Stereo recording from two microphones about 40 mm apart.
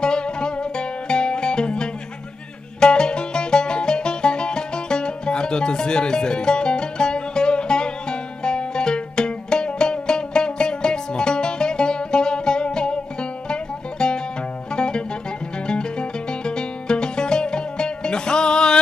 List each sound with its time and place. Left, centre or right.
0.0 s music: left